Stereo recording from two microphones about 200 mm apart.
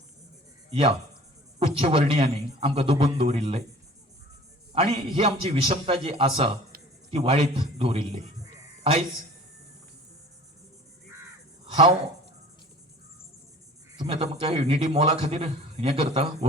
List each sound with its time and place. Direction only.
0.7 s a man's voice: 30° right (ahead or behind)
4.7 s a man's voice: 25° right (ahead or behind)
11.6 s a sound: 25° right (ahead or behind)
14.0 s a man's voice: 25° right (ahead or behind)